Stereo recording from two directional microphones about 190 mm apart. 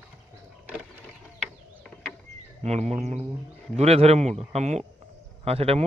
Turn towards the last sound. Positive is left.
turn(degrees=-30)  # may be behind; listen again after turning